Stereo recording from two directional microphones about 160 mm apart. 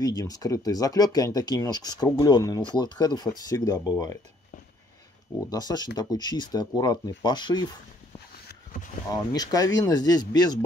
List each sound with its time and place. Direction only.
0.0 s speech: 25° left (ahead or behind)
5.5 s speech: 25° left (ahead or behind)
9.1 s speech: 25° left (ahead or behind)